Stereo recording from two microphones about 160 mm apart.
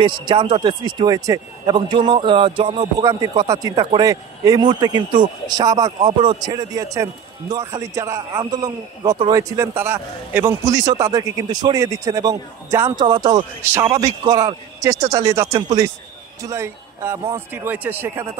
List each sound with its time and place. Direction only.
0.0 s speech: 30° right (ahead or behind)